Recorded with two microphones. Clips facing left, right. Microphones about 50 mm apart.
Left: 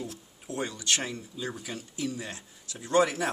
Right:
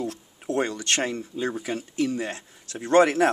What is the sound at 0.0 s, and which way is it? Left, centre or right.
Speech, right.